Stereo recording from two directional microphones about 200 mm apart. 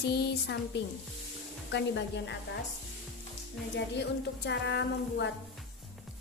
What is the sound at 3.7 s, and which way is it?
A woman's voice, 60° left (ahead or behind).